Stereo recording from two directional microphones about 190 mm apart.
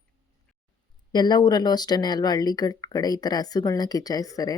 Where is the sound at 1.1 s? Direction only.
20° left (ahead or behind).